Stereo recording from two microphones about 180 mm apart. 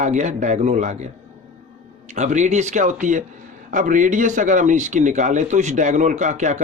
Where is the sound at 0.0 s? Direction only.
40° right (ahead or behind).